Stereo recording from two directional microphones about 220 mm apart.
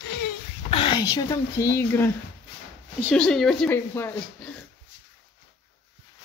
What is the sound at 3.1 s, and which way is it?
Speech, 5° left (ahead or behind).